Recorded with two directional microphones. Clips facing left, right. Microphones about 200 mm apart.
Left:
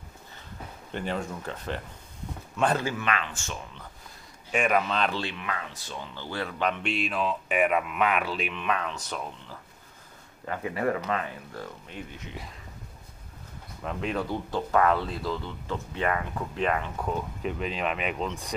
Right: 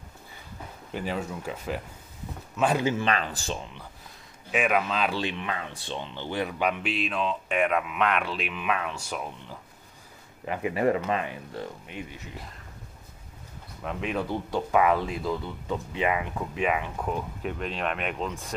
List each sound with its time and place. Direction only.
0.9 s speech: 5° right (ahead or behind)
2.8 s speech: 20° right (ahead or behind)
3.1 s speech: 35° right (ahead or behind)
4.5 s speech: 5° right (ahead or behind)
5.4 s speech: 30° right (ahead or behind)
11.9 s speech: 10° right (ahead or behind)
13.8 s speech: 5° right (ahead or behind)